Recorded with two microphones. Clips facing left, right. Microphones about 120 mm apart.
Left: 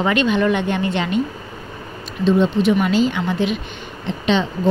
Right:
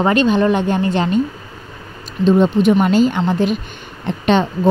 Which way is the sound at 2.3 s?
45° right (ahead or behind).